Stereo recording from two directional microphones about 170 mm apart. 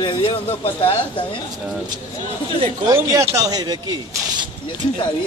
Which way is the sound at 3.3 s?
20° right (ahead or behind).